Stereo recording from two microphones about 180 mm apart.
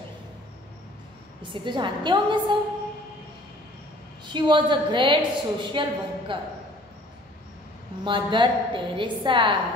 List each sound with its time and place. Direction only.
1.5 s a woman's voice: 25° right (ahead or behind)
4.3 s a woman's voice: 25° right (ahead or behind)
8.0 s a woman's voice: 25° right (ahead or behind)